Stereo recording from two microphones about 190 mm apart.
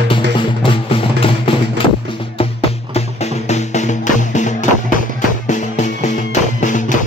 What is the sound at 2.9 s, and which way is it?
Music, 35° left (ahead or behind).